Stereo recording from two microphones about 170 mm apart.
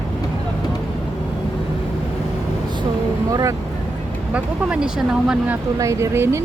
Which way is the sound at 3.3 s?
20° right (ahead or behind).